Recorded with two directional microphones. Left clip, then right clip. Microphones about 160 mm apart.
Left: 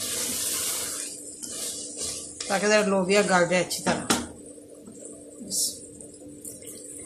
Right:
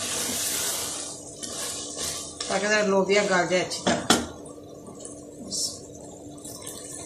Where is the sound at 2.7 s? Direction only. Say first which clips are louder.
Even; 70° left (ahead or behind).